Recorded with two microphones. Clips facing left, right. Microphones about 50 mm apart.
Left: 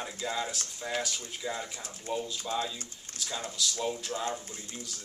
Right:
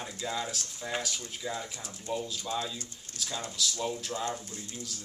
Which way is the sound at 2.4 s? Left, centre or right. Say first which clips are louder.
Left 1 dB; left.